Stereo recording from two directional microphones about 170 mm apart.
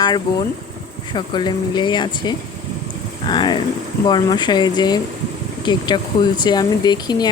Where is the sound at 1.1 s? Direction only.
25° left (ahead or behind).